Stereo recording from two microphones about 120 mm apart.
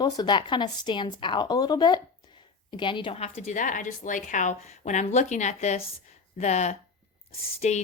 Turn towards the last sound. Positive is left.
turn(degrees=65)  # may be behind; listen again after turning